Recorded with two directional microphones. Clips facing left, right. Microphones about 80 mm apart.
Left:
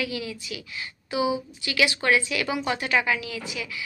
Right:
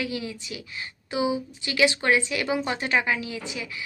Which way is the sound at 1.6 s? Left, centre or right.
Right.